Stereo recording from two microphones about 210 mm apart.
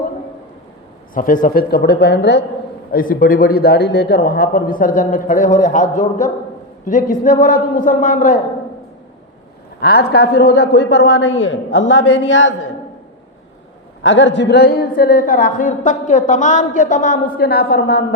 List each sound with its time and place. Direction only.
1.1 s speech: 40° left (ahead or behind); by 2.4 s 55° left (ahead or behind)
2.9 s a woman's voice: 40° left (ahead or behind)
9.8 s a man's voice: 50° left (ahead or behind)
14.0 s a woman's voice: 60° left (ahead or behind)